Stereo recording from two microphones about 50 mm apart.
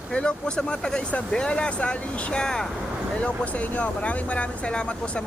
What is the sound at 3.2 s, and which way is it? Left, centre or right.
Speech, left.